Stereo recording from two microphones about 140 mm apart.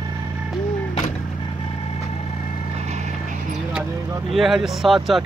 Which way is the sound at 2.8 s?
55° right (ahead or behind).